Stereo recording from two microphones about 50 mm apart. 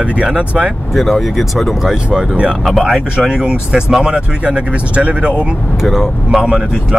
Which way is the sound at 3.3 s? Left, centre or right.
Centre.